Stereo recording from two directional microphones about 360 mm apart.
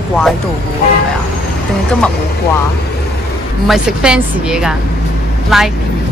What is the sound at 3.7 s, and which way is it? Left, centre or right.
Speech, centre.